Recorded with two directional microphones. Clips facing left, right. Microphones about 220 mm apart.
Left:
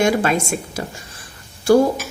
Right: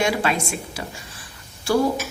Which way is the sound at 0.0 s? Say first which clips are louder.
Left 5 dB; 45° left (ahead or behind).